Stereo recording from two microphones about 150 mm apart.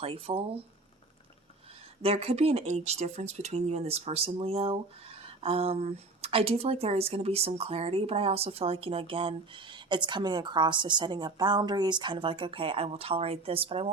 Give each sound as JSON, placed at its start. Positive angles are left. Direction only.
{"t": 0.0, "sound": "speech", "side_deg": -40}
{"t": 2.0, "sound": "speech", "side_deg": -40}